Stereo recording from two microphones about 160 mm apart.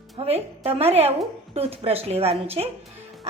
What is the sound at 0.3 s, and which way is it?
A woman's voice, 40° right (ahead or behind).